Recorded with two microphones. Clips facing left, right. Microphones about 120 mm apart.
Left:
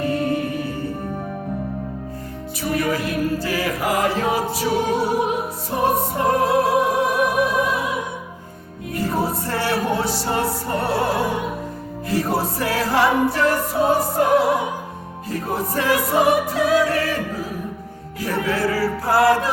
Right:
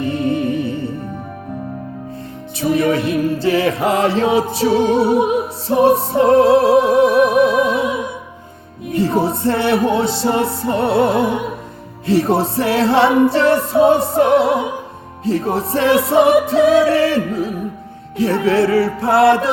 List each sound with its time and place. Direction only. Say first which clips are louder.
0.0 s music: right 3 dB; 25° right (ahead or behind)
2.6 s music: right 7 dB; 25° right (ahead or behind)
8.9 s music: right 6 dB; 25° right (ahead or behind)